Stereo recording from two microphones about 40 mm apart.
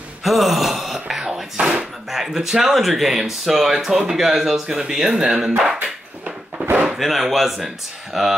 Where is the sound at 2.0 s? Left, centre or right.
Centre.